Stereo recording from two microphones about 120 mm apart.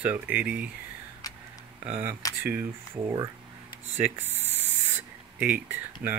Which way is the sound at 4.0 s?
15° right (ahead or behind).